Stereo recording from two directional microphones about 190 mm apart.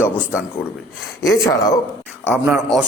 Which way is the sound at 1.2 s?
15° left (ahead or behind).